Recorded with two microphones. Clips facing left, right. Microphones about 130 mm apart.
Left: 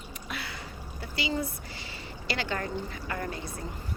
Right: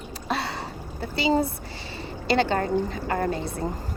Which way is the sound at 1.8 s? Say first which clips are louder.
Right 10 dB; 25° right (ahead or behind).